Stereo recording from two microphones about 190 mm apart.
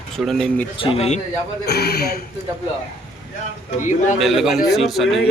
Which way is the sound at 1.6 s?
55° left (ahead or behind).